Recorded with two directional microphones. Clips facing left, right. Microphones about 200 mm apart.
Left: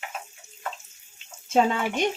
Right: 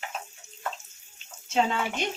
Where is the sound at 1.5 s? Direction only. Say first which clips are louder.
Left 4 dB; 50° left (ahead or behind).